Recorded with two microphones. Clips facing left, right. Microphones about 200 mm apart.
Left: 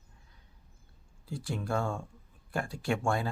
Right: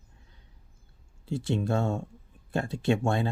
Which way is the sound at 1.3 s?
25° right (ahead or behind).